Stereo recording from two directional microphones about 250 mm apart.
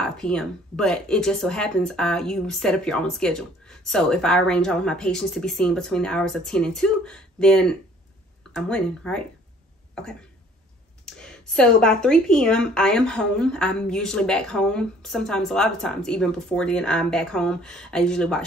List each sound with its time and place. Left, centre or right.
0.0 s speech: centre
11.1 s speech: centre